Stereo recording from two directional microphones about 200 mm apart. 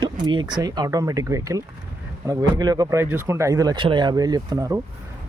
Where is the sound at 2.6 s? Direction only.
20° right (ahead or behind).